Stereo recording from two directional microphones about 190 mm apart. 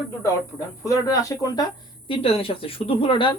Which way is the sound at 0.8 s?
15° left (ahead or behind).